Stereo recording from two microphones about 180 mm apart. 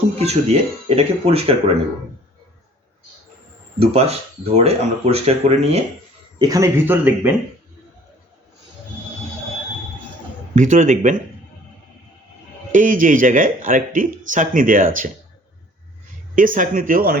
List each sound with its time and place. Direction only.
0.2 s speech: 35° right (ahead or behind)
3.8 s speech: 35° right (ahead or behind)
6.4 s speech: 20° right (ahead or behind)
10.5 s speech: 45° right (ahead or behind)
12.7 s speech: 45° right (ahead or behind)
16.3 s speech: 50° right (ahead or behind)